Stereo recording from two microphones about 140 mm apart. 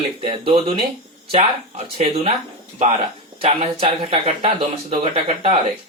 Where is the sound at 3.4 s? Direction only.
45° right (ahead or behind).